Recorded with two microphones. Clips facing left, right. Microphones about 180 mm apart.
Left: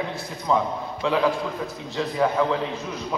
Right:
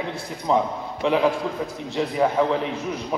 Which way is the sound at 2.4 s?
20° right (ahead or behind).